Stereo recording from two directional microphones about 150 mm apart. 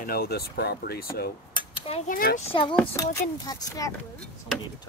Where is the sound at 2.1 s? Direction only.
80° left.